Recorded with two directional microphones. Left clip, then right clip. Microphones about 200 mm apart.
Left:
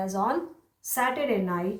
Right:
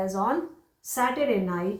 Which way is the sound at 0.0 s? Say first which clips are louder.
Right 1 dB; 35° left (ahead or behind).